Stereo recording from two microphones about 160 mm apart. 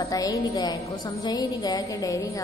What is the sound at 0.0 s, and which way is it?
A woman's voice, 20° left (ahead or behind).